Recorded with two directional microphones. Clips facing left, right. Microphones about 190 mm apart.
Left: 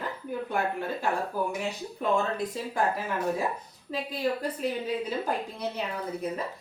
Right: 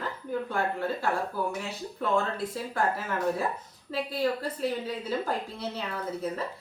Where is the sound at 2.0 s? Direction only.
15° left (ahead or behind).